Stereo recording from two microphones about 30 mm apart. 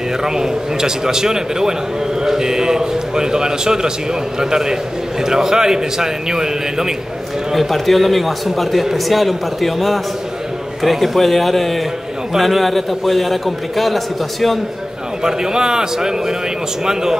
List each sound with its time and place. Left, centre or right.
0.2 s a man's voice: right
7.5 s a man's voice: centre
15.2 s a man's voice: right